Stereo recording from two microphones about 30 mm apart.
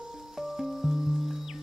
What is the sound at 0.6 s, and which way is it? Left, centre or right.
Music, centre.